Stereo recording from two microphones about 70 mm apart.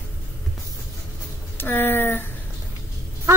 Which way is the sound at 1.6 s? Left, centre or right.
Left.